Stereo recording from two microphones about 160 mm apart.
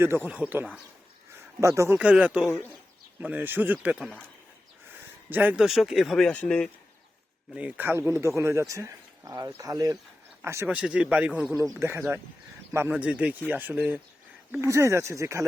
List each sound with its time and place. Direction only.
0.0 s speech: 10° right (ahead or behind)
2.5 s speech: 15° left (ahead or behind)
3.2 s speech: 10° right (ahead or behind)
5.3 s speech: 10° right (ahead or behind); by 6.7 s 10° left (ahead or behind)
7.5 s speech: 10° right (ahead or behind)